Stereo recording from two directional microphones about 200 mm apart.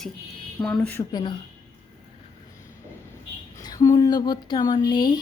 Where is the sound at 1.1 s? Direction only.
25° left (ahead or behind).